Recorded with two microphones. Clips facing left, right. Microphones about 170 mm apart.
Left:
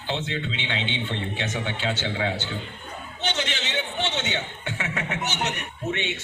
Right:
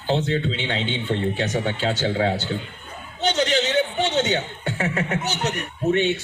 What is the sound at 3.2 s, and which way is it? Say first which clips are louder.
Chuckle: right 9 dB; 40° right (ahead or behind).